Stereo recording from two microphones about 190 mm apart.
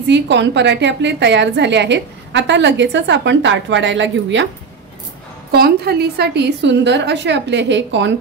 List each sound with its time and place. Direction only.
0.0 s a woman's voice: 65° right (ahead or behind)
5.5 s a woman's voice: 55° right (ahead or behind)